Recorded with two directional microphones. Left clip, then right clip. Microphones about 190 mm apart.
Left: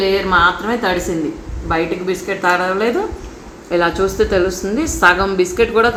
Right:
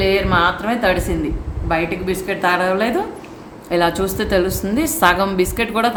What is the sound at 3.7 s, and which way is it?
A woman's voice, 60° right (ahead or behind).